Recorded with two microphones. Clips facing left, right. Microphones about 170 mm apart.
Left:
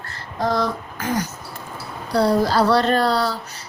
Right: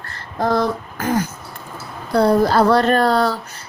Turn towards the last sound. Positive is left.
turn(degrees=-50)  # may be behind; listen again after turning